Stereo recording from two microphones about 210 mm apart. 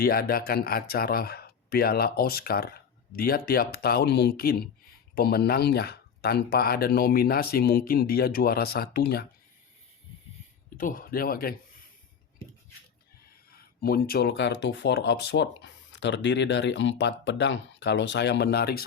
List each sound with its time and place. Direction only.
0.0 s speech: 45° left (ahead or behind)
10.8 s speech: 40° left (ahead or behind)
13.5 s speech: 45° left (ahead or behind)